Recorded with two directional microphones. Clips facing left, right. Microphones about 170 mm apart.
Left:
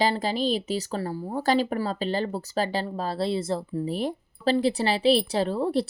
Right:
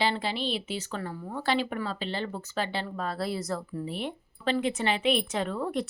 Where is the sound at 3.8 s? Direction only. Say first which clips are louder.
Left 6 dB; 40° left (ahead or behind).